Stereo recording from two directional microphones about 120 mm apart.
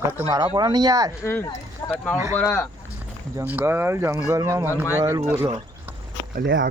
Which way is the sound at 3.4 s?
15° right (ahead or behind).